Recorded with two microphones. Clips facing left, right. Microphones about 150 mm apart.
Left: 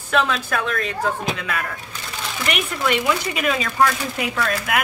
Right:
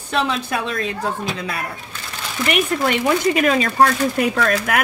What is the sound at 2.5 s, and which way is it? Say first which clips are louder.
Speech: right 3 dB; 45° right (ahead or behind).